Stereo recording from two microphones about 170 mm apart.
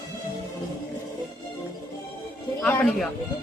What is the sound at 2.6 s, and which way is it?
Speech, 5° left (ahead or behind).